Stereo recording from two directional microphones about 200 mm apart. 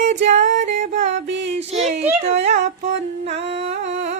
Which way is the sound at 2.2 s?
35° right (ahead or behind).